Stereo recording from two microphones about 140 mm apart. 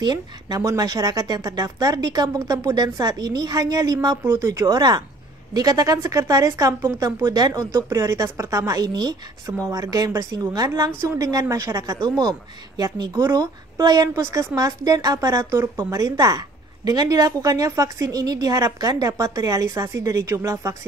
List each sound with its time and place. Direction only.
0.0 s a woman's voice: 30° right (ahead or behind)